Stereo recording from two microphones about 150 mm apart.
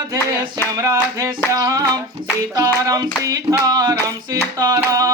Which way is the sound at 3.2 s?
25° right (ahead or behind).